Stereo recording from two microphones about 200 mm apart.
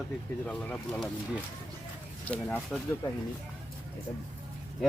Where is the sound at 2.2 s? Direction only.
5° left (ahead or behind).